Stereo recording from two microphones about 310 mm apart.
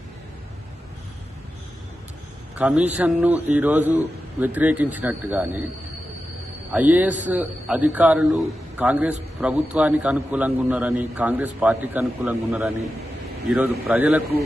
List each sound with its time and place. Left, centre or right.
2.6 s a man's voice: centre
6.7 s a man's voice: centre